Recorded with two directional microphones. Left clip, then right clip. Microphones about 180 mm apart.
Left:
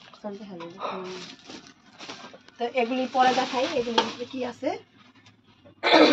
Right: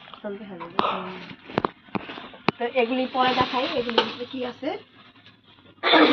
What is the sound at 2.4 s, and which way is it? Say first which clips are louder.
Speech: right 4 dB; 25° left (ahead or behind).